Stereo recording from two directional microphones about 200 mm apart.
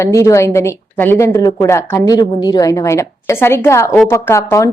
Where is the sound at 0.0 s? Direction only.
15° left (ahead or behind).